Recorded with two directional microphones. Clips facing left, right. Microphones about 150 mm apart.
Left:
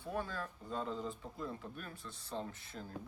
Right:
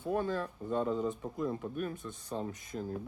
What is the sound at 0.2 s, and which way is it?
Speech, 25° right (ahead or behind).